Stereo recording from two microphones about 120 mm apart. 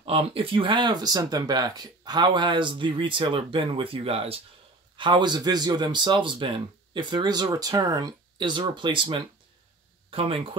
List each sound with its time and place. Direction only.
0.0 s speech: 50° right (ahead or behind)
4.9 s speech: 40° right (ahead or behind)